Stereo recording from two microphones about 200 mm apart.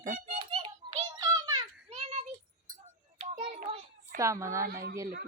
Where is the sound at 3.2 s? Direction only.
35° right (ahead or behind).